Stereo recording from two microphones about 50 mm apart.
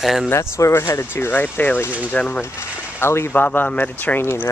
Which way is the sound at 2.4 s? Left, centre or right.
Left.